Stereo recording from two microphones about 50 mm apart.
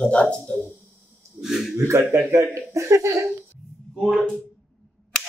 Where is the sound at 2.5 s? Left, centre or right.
Right.